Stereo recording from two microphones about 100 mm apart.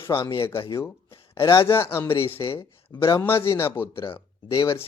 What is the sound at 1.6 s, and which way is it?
Speech, 30° left (ahead or behind).